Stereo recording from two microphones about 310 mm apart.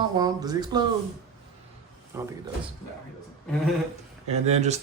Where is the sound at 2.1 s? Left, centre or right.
Centre.